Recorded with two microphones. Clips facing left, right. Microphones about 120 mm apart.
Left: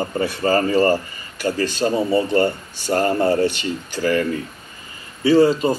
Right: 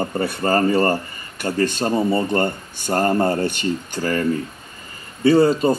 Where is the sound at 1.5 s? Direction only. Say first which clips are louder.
Right 1 dB; 50° right (ahead or behind).